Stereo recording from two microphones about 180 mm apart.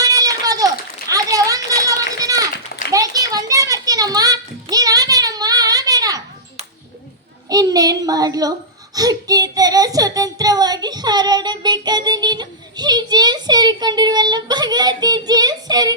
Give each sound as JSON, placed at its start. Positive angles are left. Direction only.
{"t": 0.0, "sound": "a sound", "side_deg": -20}
{"t": 2.9, "sound": "children playing", "side_deg": -20}
{"t": 7.5, "sound": "a child's voice", "side_deg": -20}
{"t": 9.0, "sound": "child singing", "side_deg": -20}